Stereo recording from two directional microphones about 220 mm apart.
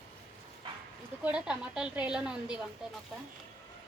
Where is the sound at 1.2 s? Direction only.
5° right (ahead or behind).